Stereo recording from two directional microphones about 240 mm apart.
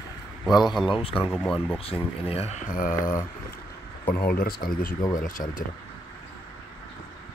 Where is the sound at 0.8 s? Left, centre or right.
Left.